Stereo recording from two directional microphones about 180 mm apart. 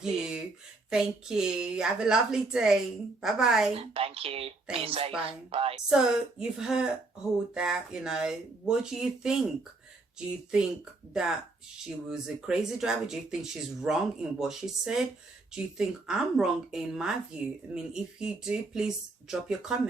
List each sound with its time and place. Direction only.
0.0 s speech: 5° right (ahead or behind)
3.8 s speech: 30° right (ahead or behind)
5.9 s speech: 5° right (ahead or behind)
11.1 s speech: 5° right (ahead or behind)